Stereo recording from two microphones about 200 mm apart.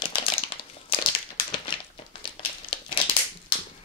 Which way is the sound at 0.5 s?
25° left (ahead or behind).